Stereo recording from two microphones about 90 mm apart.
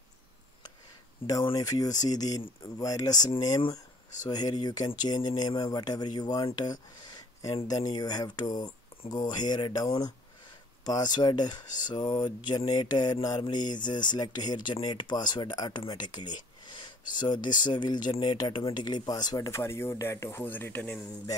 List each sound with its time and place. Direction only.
1.2 s speech: 90° left
1.6 s speech: 45° left (ahead or behind)
20.4 s speech: 20° left (ahead or behind)